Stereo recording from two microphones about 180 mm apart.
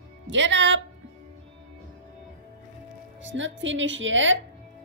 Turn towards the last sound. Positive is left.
turn(degrees=-90)